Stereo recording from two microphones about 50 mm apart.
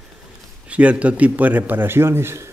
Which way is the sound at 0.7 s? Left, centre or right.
Right.